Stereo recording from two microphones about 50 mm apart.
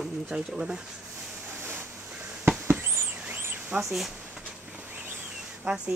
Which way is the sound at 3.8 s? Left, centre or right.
Centre.